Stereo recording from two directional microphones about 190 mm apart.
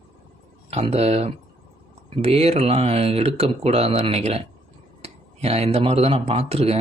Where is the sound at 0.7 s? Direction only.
35° right (ahead or behind).